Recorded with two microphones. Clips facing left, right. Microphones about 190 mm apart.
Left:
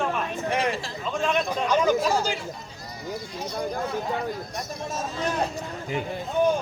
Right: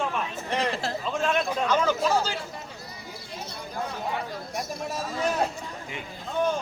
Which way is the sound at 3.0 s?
45° left (ahead or behind).